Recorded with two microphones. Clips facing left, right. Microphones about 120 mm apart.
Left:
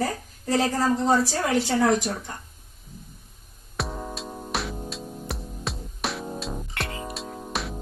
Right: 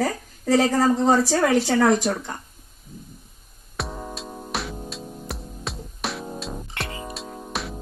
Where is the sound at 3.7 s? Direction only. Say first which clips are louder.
Even; centre (ahead or behind).